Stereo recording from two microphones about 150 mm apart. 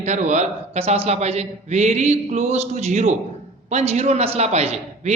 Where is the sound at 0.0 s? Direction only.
50° right (ahead or behind).